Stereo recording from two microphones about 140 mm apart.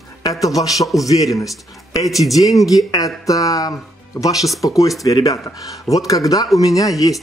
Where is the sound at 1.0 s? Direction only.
25° left (ahead or behind).